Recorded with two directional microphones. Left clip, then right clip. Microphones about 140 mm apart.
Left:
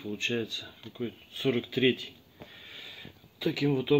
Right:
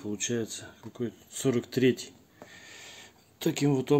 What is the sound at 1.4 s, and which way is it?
Speech, 50° right (ahead or behind).